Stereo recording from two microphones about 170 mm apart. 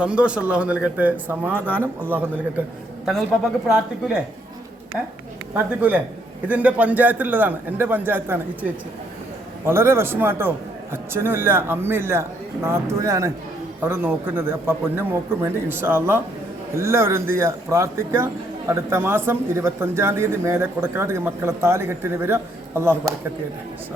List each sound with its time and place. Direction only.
0.0 s speech: 5° right (ahead or behind)
3.1 s speech: centre (ahead or behind)
5.5 s speech: 10° right (ahead or behind)
9.6 s speech: 15° right (ahead or behind)